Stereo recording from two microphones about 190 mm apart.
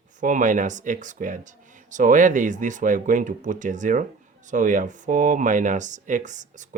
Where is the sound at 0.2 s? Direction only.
40° right (ahead or behind).